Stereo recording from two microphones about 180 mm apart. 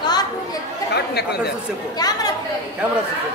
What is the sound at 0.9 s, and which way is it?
Speech, 65° left (ahead or behind).